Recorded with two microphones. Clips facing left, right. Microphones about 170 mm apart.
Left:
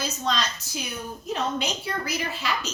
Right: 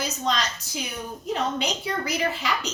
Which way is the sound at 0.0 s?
15° right (ahead or behind).